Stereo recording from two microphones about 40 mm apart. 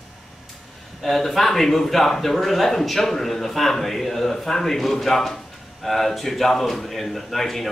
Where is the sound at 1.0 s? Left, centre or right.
Centre.